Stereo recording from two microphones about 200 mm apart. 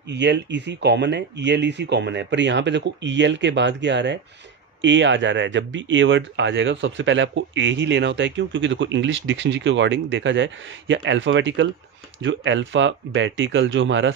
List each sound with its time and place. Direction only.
0.1 s speech: 60° right (ahead or behind)